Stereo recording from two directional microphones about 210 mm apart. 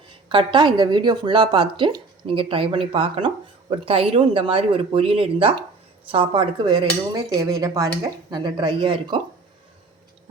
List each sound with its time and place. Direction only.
0.3 s speech: 25° right (ahead or behind)
6.1 s dishes: 25° right (ahead or behind)
8.3 s speech: 20° right (ahead or behind)